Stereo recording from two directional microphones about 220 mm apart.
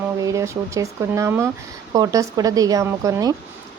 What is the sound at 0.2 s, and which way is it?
Speech, 15° right (ahead or behind).